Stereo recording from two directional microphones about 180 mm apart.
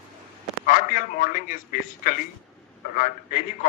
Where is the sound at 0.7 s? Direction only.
50° left (ahead or behind).